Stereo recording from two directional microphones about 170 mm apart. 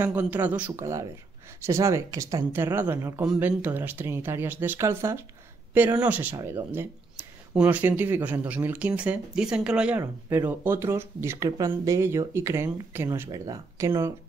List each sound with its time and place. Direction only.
0.0 s speech: 10° right (ahead or behind)